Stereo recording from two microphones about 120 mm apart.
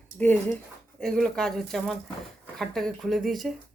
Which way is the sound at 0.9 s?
5° left (ahead or behind).